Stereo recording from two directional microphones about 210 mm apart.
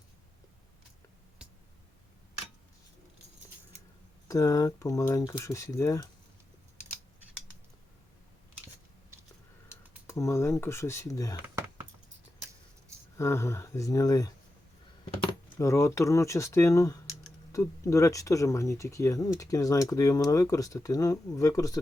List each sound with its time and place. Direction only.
4.3 s speech: 15° left (ahead or behind)
10.1 s speech: 15° left (ahead or behind)
11.4 s a sound: 10° right (ahead or behind)
13.1 s speech: 15° left (ahead or behind)